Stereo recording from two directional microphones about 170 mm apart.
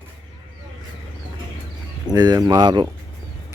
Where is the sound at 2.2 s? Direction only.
20° right (ahead or behind).